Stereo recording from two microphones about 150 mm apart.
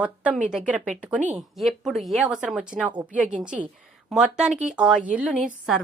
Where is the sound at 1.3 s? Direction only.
Centre (ahead or behind).